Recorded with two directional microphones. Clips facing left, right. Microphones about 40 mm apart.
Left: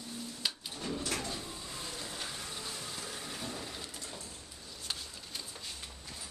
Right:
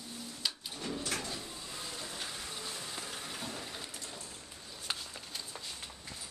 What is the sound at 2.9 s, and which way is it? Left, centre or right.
Vehicle, right.